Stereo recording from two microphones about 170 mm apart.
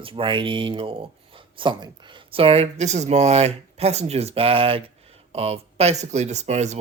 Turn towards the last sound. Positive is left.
turn(degrees=-40)  # may be behind; listen again after turning